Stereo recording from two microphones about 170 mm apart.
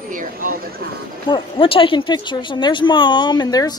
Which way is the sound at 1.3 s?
30° left (ahead or behind).